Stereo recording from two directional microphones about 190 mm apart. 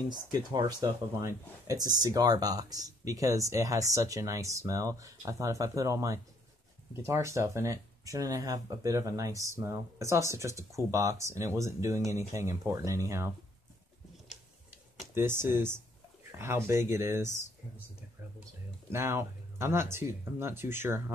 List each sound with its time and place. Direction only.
0.3 s speech: 20° right (ahead or behind)
14.3 s tick-tock: centre (ahead or behind)
15.1 s speech: 10° right (ahead or behind)
18.9 s speech: 15° right (ahead or behind)